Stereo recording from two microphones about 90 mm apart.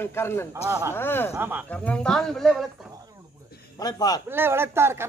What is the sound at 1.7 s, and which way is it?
Speech, 10° left (ahead or behind).